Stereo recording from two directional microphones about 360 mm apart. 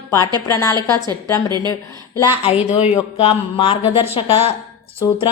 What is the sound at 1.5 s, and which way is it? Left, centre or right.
Speech, centre.